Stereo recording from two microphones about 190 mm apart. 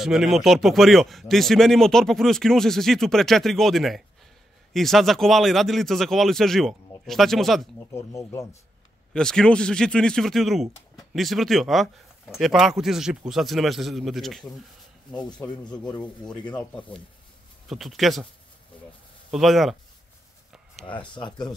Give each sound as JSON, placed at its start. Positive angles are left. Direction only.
{"t": 0.0, "sound": "speech", "side_deg": 0}
{"t": 7.9, "sound": "speech", "side_deg": 15}
{"t": 9.1, "sound": "speech", "side_deg": 5}
{"t": 15.1, "sound": "speech", "side_deg": 20}
{"t": 17.6, "sound": "speech", "side_deg": 0}
{"t": 19.3, "sound": "speech", "side_deg": 0}
{"t": 21.1, "sound": "speech", "side_deg": 25}